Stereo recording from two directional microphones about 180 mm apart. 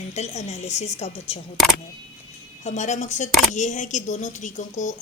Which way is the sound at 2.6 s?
40° left (ahead or behind).